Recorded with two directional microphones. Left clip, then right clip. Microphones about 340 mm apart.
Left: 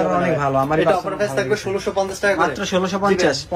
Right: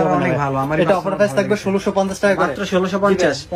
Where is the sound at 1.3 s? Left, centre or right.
Centre.